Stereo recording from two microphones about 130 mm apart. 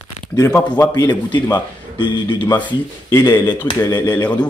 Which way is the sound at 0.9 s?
35° left (ahead or behind).